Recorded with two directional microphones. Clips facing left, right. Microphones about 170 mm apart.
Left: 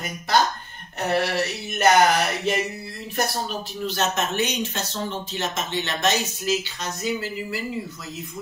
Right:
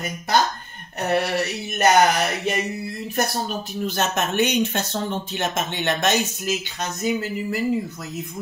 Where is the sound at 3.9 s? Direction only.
55° right (ahead or behind).